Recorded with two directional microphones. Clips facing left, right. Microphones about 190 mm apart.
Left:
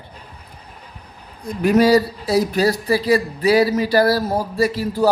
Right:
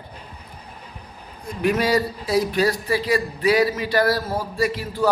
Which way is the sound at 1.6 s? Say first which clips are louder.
Left 6 dB; 40° left (ahead or behind).